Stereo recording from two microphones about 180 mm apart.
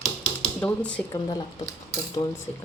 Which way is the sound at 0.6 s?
5° left (ahead or behind).